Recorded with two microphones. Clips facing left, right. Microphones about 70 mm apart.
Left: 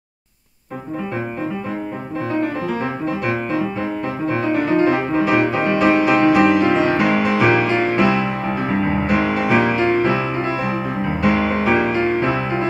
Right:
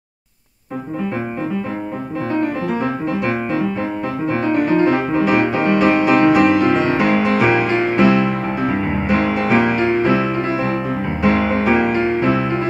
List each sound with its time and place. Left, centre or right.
3.1 s music: centre
4.7 s music: centre
5.2 s music: centre
9.1 s music: centre
9.7 s music: centre
11.2 s music: centre